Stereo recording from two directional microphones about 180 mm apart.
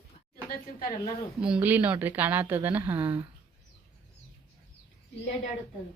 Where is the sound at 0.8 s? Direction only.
50° left (ahead or behind).